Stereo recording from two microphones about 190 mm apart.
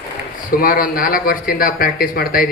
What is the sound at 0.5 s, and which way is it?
Speech, 50° left (ahead or behind).